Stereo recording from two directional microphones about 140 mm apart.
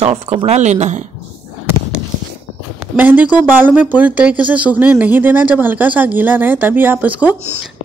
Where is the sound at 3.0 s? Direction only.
10° right (ahead or behind).